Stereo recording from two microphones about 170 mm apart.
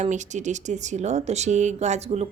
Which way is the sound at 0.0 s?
45° right (ahead or behind).